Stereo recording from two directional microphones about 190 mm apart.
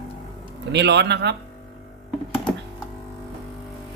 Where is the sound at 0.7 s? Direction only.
65° right (ahead or behind).